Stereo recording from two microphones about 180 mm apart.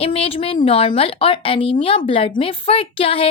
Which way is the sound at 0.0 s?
30° left (ahead or behind).